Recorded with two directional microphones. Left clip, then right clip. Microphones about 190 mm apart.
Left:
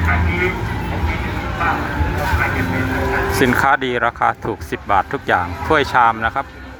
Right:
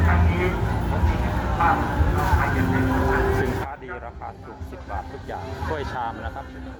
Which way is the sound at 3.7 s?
35° left (ahead or behind).